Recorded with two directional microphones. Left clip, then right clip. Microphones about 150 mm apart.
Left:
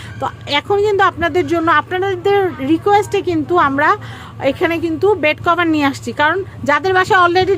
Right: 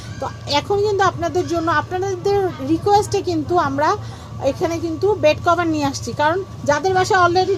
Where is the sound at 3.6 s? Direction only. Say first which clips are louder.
Left 5 dB; 25° left (ahead or behind).